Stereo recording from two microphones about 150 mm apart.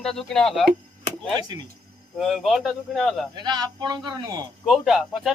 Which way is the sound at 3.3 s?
30° right (ahead or behind).